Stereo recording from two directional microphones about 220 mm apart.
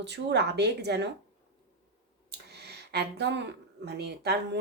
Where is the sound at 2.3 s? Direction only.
50° right (ahead or behind).